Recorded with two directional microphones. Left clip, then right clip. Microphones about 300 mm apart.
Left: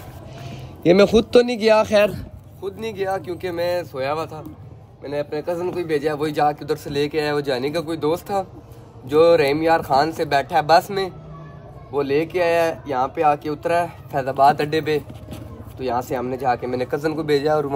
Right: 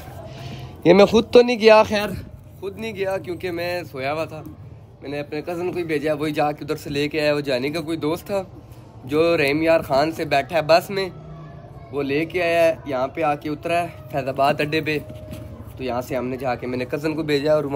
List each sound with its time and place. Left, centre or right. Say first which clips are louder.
0.4 s a man's voice: right 1 dB; centre